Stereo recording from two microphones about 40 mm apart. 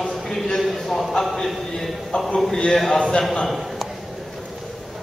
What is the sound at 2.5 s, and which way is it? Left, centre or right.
Speech, centre.